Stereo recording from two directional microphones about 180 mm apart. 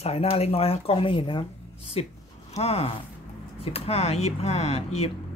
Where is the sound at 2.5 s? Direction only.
35° left (ahead or behind).